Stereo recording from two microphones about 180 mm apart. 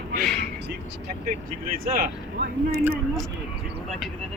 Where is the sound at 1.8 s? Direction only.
55° right (ahead or behind).